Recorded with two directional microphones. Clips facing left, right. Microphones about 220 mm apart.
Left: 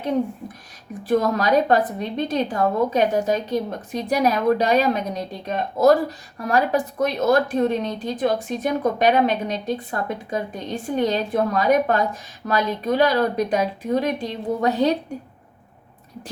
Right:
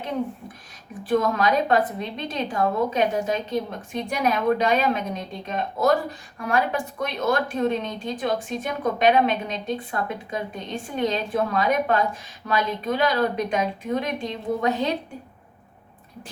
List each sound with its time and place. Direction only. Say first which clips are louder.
1.0 s a woman's voice: left 2 dB; 40° left (ahead or behind)